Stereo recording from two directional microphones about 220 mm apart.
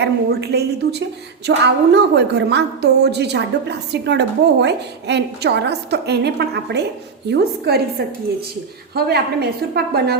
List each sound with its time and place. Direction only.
0.0 s a woman's voice: 50° right (ahead or behind)